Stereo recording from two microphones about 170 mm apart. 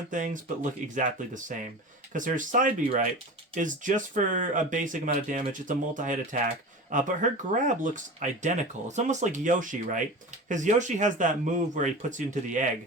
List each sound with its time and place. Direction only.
0.1 s speech: 50° right (ahead or behind)